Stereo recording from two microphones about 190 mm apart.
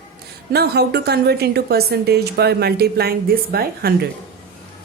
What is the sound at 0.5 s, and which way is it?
A woman's voice, 60° right (ahead or behind).